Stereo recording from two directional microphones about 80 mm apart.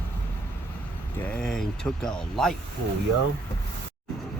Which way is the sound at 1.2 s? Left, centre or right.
Centre.